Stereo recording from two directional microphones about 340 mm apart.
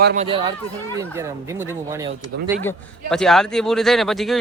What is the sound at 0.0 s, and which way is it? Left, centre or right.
Speech, right.